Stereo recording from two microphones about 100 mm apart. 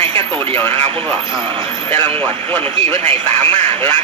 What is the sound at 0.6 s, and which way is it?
Speech, 25° left (ahead or behind).